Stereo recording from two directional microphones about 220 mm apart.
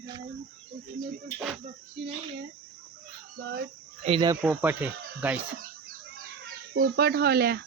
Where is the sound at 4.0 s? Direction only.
25° right (ahead or behind).